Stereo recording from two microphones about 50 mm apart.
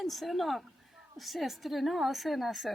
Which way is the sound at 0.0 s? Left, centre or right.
Centre.